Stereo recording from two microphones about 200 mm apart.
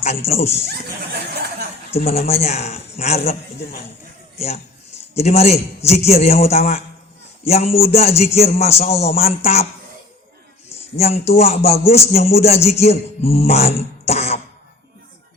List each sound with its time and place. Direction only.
0.0 s cough: 30° left (ahead or behind)
1.3 s a sound: 55° right (ahead or behind)
2.0 s cough: 30° left (ahead or behind)
4.4 s speech: 30° left (ahead or behind)
5.1 s cough: 30° left (ahead or behind)
10.9 s cough: 30° left (ahead or behind)